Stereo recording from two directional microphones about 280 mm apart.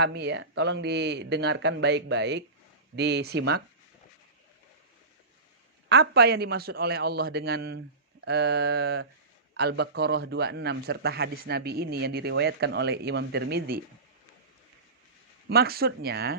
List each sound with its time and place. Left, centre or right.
0.0 s speech: right
5.9 s speech: right
15.4 s speech: right